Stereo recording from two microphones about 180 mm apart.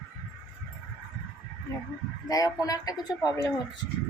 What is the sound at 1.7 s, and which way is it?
Speech, 20° left (ahead or behind).